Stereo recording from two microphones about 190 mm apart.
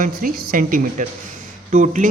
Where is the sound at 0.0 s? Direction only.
45° right (ahead or behind).